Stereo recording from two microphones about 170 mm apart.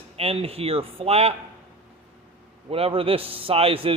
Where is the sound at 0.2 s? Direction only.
35° right (ahead or behind).